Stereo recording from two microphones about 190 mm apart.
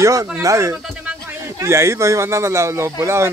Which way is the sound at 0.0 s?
15° right (ahead or behind).